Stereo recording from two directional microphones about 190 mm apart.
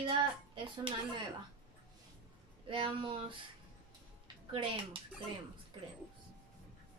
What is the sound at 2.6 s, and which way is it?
Speech, 25° right (ahead or behind).